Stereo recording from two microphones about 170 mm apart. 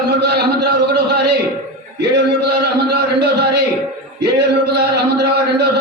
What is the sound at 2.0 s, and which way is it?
Music, 80° right.